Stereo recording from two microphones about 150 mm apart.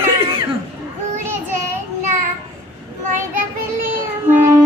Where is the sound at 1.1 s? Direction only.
15° right (ahead or behind).